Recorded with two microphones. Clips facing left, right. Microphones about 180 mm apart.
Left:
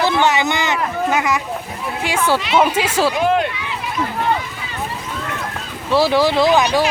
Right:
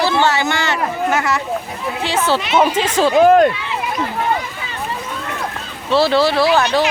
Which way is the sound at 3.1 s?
45° right (ahead or behind).